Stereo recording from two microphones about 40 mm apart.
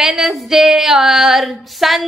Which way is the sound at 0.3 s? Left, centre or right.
Centre.